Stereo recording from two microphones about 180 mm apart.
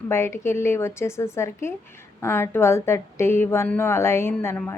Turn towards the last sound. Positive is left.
turn(degrees=15)  # may be behind; listen again after turning